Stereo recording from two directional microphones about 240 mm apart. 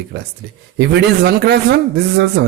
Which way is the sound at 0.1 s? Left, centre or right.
Right.